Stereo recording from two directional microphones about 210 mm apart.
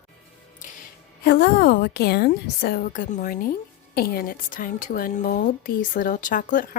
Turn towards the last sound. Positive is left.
turn(degrees=40)  # may be behind; listen again after turning